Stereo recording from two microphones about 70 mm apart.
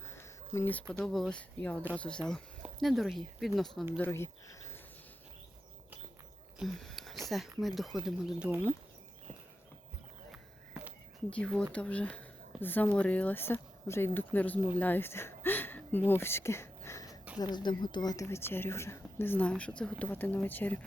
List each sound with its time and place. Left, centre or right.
0.0 s a sound: left
0.9 s speech: centre
1.3 s speech: centre
4.0 s speech: left
6.7 s a sound: centre
7.3 s speech: centre
8.4 s speech: right
11.3 s speech: centre
14.8 s a sound: left
16.0 s speech: left
17.4 s speech: left
18.3 s speech: left
19.5 s speech: centre
20.1 s speech: left